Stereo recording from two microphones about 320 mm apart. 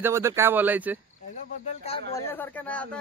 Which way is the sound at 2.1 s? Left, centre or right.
Centre.